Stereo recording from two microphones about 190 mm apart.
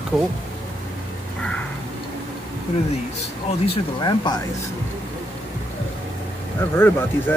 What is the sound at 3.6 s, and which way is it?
Speech, 25° left (ahead or behind).